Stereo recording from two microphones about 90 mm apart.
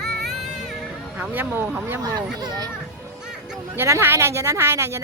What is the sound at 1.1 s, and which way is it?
Speech, 20° right (ahead or behind).